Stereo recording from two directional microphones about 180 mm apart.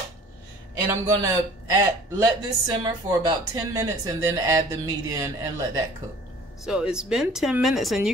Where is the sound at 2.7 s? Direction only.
25° right (ahead or behind).